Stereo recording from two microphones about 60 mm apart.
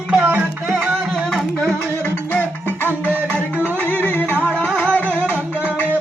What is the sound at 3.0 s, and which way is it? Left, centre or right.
Music, right.